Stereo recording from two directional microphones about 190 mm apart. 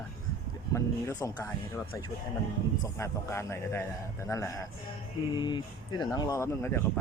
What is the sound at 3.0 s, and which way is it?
Speech, 15° left (ahead or behind).